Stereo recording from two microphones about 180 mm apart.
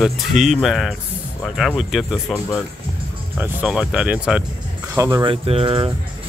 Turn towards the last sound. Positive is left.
turn(degrees=-30)  # may be behind; listen again after turning